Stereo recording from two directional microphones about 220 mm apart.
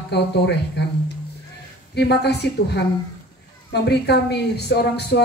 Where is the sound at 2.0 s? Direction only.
50° left (ahead or behind).